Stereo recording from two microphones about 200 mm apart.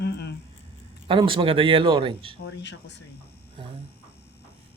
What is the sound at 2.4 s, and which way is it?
Speech, 60° left (ahead or behind).